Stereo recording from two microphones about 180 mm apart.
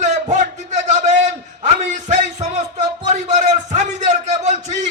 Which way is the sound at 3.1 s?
40° right (ahead or behind).